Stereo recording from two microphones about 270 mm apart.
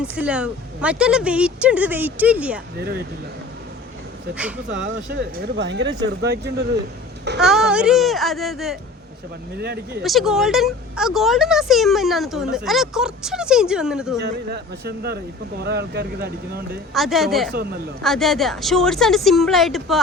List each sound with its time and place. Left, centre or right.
0.0 s speech: centre
2.7 s speech: right
5.1 s speech: right
7.4 s speech: centre
9.6 s speech: right
10.0 s speech: centre
14.2 s speech: right
16.9 s speech: centre